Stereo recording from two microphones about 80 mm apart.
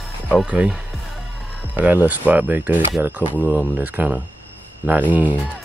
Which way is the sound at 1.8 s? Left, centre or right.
Centre.